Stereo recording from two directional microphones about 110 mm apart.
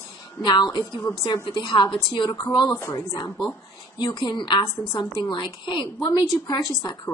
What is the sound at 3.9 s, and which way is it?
A woman's voice, 45° left (ahead or behind).